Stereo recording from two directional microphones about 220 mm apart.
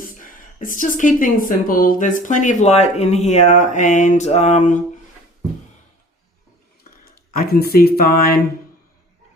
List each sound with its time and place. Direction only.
0.0 s speech: 40° left (ahead or behind)
7.0 s speech: 45° left (ahead or behind)